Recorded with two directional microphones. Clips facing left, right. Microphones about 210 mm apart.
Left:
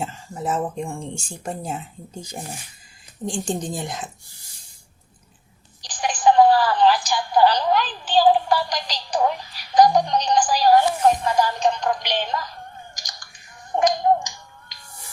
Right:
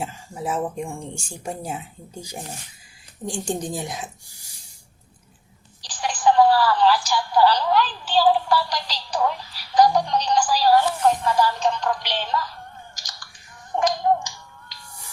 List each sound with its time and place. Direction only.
0.0 s speech: 10° right (ahead or behind)
3.2 s speech: 10° right (ahead or behind)
5.8 s telephone: 15° left (ahead or behind)
13.7 s finger snapping: 15° left (ahead or behind)